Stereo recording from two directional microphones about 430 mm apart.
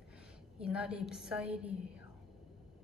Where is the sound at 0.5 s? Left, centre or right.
Centre.